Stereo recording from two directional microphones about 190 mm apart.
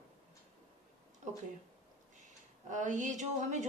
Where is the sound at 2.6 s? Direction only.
40° right (ahead or behind).